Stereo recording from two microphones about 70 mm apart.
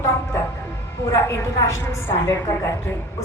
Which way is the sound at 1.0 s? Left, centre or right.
Left.